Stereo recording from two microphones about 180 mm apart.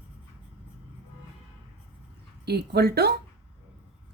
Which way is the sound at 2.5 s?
65° right (ahead or behind).